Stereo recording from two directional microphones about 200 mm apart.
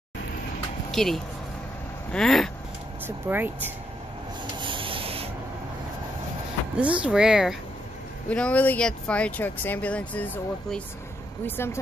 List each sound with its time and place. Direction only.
0.9 s speech: centre (ahead or behind)
3.3 s speech: 10° right (ahead or behind)
4.6 s rub: 25° right (ahead or behind)
6.8 s speech: 5° right (ahead or behind); by 11.8 s 10° left (ahead or behind)